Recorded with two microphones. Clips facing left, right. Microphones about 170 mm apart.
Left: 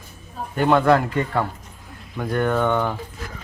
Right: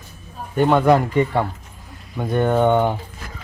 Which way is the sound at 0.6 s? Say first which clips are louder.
Right 2 dB; 15° right (ahead or behind).